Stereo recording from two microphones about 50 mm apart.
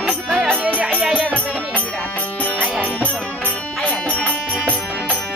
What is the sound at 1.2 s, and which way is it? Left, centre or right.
Music, left.